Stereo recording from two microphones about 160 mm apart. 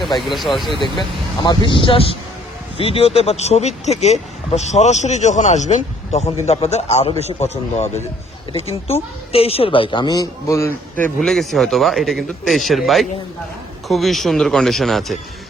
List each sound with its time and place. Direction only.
0.3 s a man's voice: centre (ahead or behind)
0.8 s a man's voice: 30° left (ahead or behind); by 15.2 s centre (ahead or behind)